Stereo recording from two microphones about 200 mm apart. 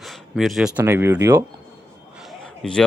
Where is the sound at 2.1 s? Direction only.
Centre (ahead or behind).